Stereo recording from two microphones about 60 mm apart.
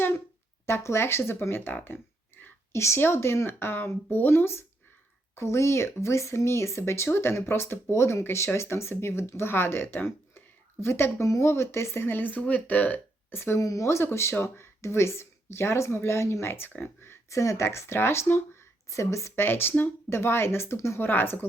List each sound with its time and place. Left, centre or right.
0.6 s speech: left
2.7 s speech: left
13.3 s speech: left
13.6 s speech: left
16.5 s speech: left
18.9 s a woman's voice: left
19.5 s speech: left
21.1 s speech: left